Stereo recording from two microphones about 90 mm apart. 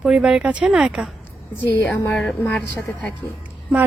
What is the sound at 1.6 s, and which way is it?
Speech, 20° left (ahead or behind).